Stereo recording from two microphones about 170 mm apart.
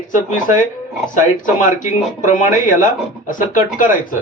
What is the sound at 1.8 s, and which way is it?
Speech, 50° left (ahead or behind).